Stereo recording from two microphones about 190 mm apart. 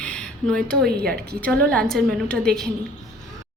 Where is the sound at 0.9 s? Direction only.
55° right (ahead or behind).